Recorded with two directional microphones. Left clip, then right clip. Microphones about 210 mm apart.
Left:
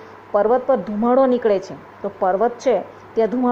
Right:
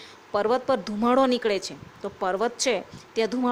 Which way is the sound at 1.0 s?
35° right (ahead or behind).